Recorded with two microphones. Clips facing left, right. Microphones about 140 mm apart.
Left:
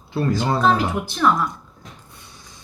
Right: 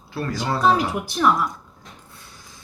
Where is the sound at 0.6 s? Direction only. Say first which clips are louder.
Right 3 dB; 10° right (ahead or behind).